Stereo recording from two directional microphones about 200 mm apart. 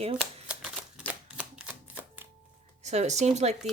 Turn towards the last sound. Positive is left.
turn(degrees=-35)  # may be behind; listen again after turning